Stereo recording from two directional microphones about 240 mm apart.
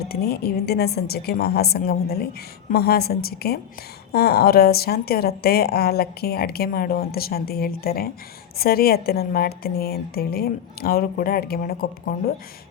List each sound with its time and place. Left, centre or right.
0.0 s a woman's voice: left